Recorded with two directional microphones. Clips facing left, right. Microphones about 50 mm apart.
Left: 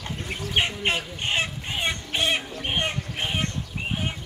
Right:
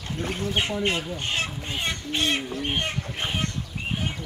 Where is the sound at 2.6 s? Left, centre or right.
Left.